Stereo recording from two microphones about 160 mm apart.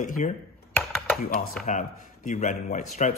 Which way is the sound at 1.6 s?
5° left (ahead or behind).